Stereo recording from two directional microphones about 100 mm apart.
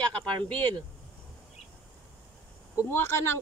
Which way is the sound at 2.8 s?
25° left (ahead or behind).